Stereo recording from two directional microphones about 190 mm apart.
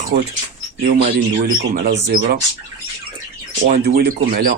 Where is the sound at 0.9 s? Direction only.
30° right (ahead or behind).